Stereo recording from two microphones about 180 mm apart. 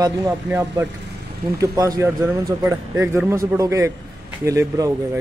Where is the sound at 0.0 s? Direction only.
15° right (ahead or behind).